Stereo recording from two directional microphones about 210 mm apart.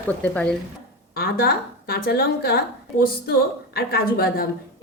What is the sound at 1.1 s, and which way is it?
A woman's voice, 45° left (ahead or behind).